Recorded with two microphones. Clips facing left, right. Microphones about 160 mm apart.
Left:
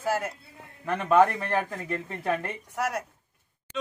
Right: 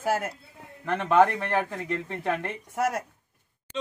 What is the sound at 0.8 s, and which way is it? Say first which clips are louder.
Speech: left 1 dB; 5° left (ahead or behind).